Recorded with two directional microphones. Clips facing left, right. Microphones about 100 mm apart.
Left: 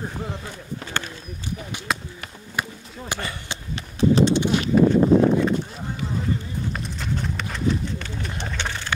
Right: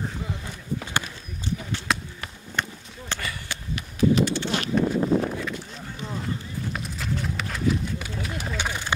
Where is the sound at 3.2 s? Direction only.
30° left (ahead or behind).